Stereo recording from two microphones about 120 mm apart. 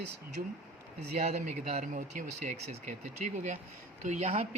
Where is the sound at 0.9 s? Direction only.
65° right (ahead or behind); by 3.6 s 90° right.